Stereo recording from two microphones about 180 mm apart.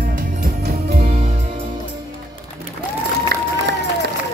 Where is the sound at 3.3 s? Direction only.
60° right (ahead or behind).